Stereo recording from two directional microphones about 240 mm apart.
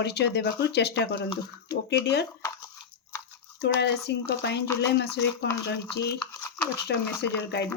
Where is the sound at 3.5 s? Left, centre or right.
Left.